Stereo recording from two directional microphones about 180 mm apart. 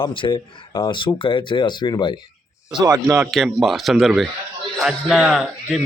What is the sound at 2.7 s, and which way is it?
Speech, 20° right (ahead or behind).